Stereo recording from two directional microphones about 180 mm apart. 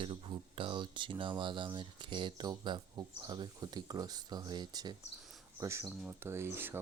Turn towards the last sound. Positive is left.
turn(degrees=-15)  # may be behind; listen again after turning